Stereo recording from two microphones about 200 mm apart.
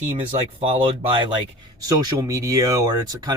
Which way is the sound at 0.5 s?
25° right (ahead or behind).